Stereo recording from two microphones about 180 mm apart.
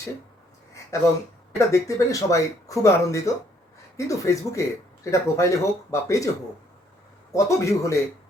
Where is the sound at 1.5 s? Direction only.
20° left (ahead or behind).